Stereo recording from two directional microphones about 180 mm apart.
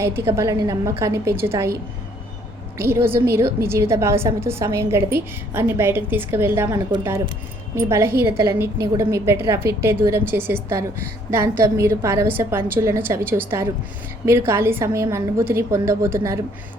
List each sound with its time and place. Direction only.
0.0 s a woman's voice: 15° right (ahead or behind)
2.7 s a woman's voice: 15° right (ahead or behind)